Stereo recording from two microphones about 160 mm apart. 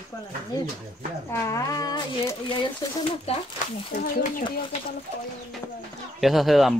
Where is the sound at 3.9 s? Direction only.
60° left (ahead or behind).